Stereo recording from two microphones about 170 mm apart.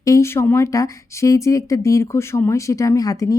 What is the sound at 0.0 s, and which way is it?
Speech, 15° left (ahead or behind).